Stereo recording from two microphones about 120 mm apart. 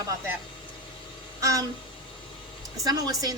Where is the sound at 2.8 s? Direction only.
35° right (ahead or behind).